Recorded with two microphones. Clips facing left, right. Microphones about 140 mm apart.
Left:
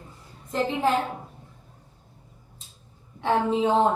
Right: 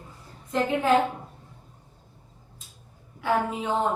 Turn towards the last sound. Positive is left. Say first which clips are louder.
# left 5 dB
turn(degrees=25)  # may be behind; listen again after turning